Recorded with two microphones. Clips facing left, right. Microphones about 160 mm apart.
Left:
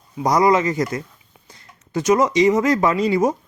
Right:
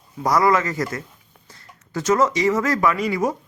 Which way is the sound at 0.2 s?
20° left (ahead or behind).